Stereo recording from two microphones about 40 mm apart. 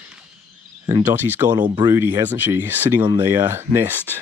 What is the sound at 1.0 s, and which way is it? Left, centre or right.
Speech, right.